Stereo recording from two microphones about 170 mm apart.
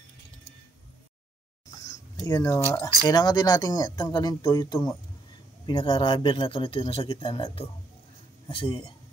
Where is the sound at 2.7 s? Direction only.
20° left (ahead or behind).